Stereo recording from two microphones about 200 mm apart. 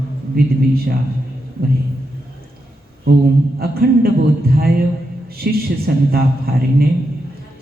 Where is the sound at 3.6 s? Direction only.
50° right (ahead or behind).